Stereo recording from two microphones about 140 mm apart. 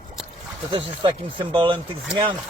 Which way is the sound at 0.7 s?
35° right (ahead or behind).